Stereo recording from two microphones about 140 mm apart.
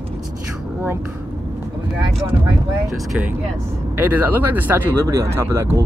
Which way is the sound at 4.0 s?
10° right (ahead or behind).